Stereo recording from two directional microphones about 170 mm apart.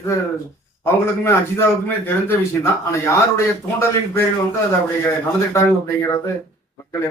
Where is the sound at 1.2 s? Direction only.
15° left (ahead or behind).